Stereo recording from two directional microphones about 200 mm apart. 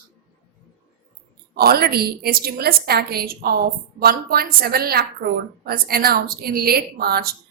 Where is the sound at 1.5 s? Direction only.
50° right (ahead or behind).